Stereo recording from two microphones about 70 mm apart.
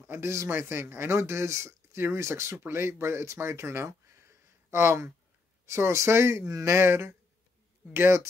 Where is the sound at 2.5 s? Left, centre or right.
Right.